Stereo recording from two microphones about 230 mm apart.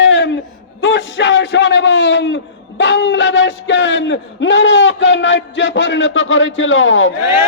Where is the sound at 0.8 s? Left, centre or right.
Left.